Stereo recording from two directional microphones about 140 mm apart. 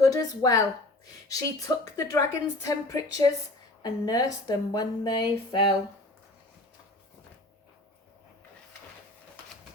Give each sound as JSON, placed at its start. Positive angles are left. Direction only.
{"t": 0.0, "sound": "a woman's voice", "side_deg": 25}